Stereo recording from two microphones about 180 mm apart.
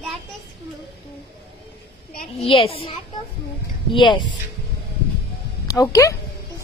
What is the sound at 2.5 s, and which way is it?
A child's voice, 30° left (ahead or behind).